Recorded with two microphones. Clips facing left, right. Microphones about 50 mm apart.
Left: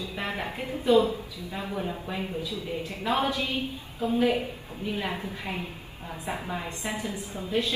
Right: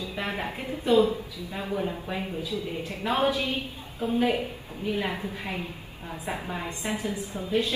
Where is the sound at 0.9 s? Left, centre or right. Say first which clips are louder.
Even; right.